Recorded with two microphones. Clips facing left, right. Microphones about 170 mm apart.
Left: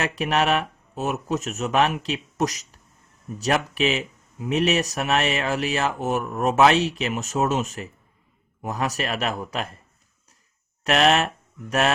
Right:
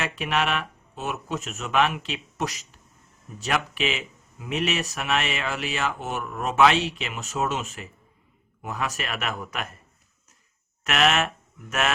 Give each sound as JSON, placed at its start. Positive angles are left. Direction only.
{"t": 0.0, "sound": "speech", "side_deg": 40}
{"t": 10.8, "sound": "speech", "side_deg": 35}